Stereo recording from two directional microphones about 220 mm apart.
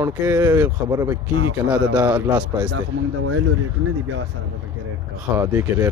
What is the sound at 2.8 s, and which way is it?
Speech, 70° right (ahead or behind).